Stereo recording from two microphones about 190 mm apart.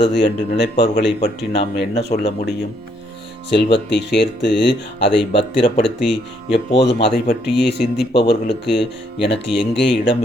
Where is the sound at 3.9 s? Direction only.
65° left (ahead or behind).